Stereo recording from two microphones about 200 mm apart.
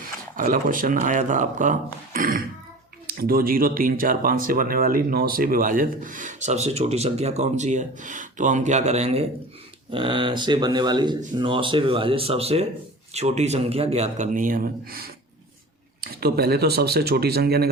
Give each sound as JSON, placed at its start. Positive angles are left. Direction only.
{"t": 0.3, "sound": "speech", "side_deg": -45}